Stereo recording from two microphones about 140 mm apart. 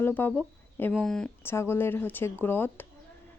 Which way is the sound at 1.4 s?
15° left (ahead or behind).